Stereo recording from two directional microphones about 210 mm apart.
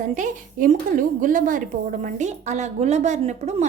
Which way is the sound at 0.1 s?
40° right (ahead or behind).